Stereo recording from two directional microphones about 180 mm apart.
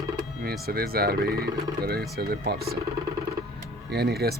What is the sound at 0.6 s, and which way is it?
Speech, 60° right (ahead or behind).